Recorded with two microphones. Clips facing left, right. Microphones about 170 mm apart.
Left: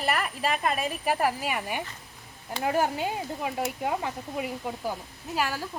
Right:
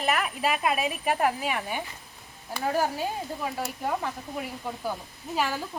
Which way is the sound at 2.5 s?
20° left (ahead or behind).